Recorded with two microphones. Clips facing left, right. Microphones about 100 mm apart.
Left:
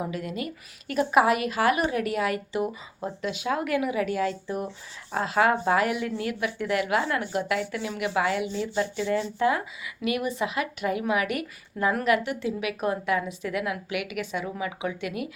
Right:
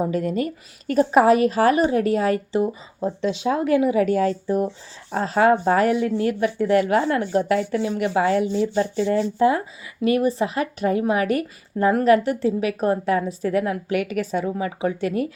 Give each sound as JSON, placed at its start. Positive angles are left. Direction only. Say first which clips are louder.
{"t": 0.0, "sound": "speech", "louder": "right 9 dB", "side_deg": -40}